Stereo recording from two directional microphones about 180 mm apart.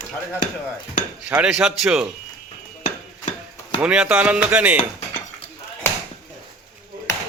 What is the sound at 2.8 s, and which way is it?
Stir, 40° left (ahead or behind).